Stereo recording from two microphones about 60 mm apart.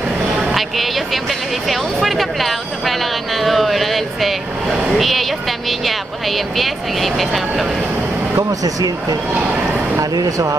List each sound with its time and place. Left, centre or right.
0.6 s speech: centre
8.4 s speech: right
9.9 s speech: right